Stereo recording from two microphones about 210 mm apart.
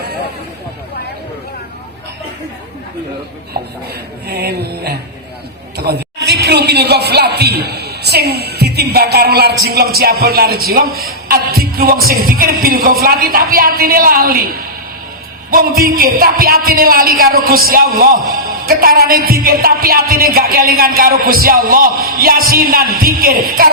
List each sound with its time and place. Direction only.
4.3 s music: 50° right (ahead or behind)
5.7 s a man's voice: 50° right (ahead or behind)